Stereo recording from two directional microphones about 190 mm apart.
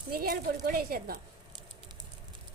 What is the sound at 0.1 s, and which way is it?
A woman's voice, 50° right (ahead or behind).